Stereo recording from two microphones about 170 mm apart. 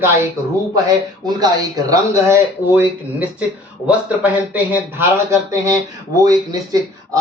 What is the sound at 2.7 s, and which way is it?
A man's voice, 10° right (ahead or behind).